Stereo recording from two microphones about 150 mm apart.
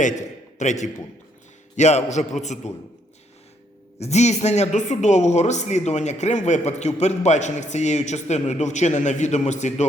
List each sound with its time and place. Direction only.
0.0 s a man's voice: 50° left (ahead or behind)
4.0 s speech: 50° left (ahead or behind)